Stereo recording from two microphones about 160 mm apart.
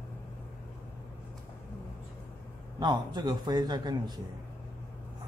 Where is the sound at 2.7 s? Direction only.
25° right (ahead or behind).